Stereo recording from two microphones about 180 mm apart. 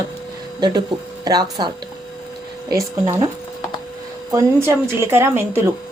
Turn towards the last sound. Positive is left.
turn(degrees=-15)  # may be behind; listen again after turning